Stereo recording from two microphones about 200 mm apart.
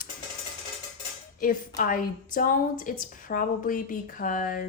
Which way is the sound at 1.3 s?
45° left (ahead or behind).